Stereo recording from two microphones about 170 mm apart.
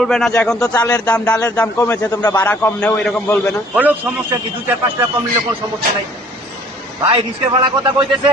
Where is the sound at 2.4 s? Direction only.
10° left (ahead or behind).